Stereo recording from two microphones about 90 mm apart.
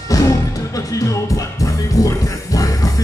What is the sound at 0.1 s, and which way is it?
Music, 40° left (ahead or behind).